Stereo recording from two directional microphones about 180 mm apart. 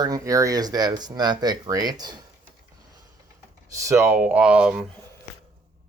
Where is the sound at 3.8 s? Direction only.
15° right (ahead or behind).